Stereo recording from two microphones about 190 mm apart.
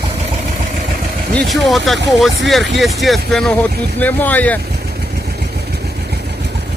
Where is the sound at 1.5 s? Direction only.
Centre (ahead or behind).